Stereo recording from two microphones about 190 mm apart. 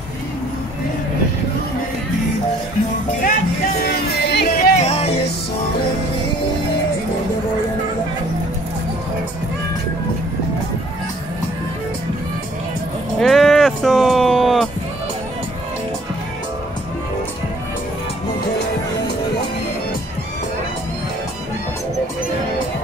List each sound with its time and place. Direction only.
4.1 s music: 60° left (ahead or behind)
4.5 s music: 35° left (ahead or behind)
13.2 s music: 5° left (ahead or behind)